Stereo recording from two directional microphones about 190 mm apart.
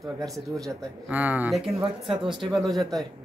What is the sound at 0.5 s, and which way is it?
Speech, 15° right (ahead or behind).